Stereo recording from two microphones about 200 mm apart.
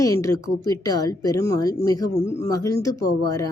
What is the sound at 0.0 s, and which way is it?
Speech, 15° left (ahead or behind).